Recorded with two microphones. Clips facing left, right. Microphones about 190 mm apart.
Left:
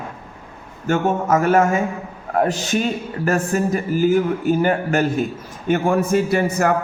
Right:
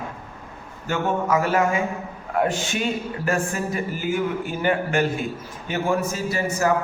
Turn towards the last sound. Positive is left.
turn(degrees=60)  # may be behind; listen again after turning